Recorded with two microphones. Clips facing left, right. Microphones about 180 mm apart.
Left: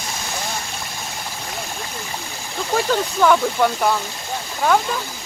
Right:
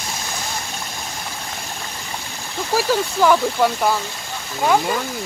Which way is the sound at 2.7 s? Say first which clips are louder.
Right 1 dB; 5° right (ahead or behind).